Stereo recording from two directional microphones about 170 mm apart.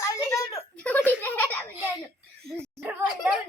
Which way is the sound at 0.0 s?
20° left (ahead or behind).